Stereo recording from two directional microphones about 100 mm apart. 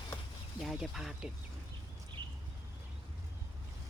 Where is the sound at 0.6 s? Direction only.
Centre (ahead or behind).